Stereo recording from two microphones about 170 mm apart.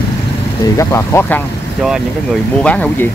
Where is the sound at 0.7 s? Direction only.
15° left (ahead or behind).